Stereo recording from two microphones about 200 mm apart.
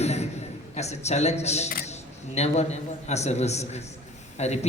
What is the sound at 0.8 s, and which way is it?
A woman's voice, 35° left (ahead or behind).